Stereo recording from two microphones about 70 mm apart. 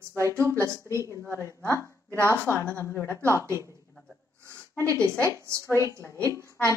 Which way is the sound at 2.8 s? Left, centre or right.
Left.